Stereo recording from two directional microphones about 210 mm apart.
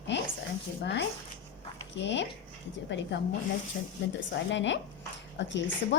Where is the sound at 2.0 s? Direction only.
60° left (ahead or behind).